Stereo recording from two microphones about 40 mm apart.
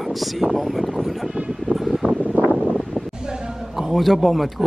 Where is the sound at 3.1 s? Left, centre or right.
Centre.